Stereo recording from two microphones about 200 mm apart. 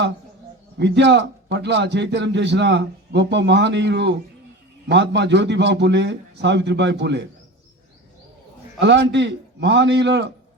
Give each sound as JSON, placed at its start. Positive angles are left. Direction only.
{"t": 0.8, "sound": "a man's voice", "side_deg": -60}
{"t": 8.8, "sound": "a man's voice", "side_deg": -60}